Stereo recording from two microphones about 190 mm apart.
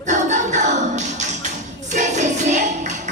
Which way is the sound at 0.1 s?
40° right (ahead or behind).